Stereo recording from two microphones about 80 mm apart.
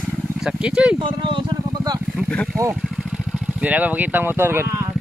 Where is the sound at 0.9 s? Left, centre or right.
Right.